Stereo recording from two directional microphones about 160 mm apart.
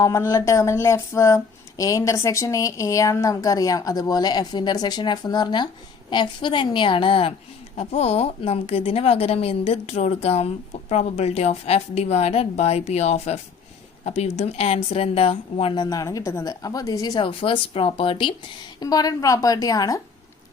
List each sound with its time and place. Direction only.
0.0 s a woman's voice: 20° left (ahead or behind)